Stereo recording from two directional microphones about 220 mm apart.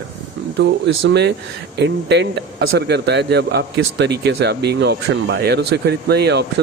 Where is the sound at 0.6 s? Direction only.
50° right (ahead or behind).